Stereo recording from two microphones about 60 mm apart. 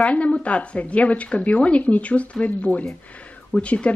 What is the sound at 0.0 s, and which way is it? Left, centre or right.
A woman's voice, left.